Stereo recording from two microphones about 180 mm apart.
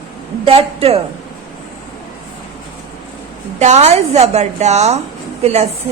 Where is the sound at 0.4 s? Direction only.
30° right (ahead or behind).